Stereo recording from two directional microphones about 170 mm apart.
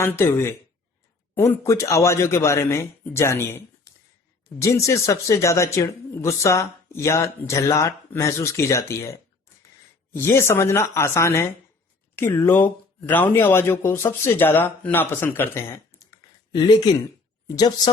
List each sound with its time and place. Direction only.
0.0 s speech: 15° left (ahead or behind)
16.5 s speech: 25° left (ahead or behind)